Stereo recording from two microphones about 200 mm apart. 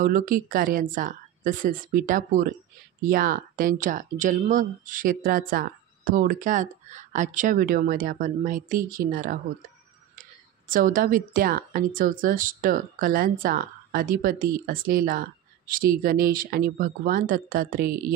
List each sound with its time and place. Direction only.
0.0 s a woman's voice: 45° right (ahead or behind)
10.7 s a woman's voice: 45° right (ahead or behind)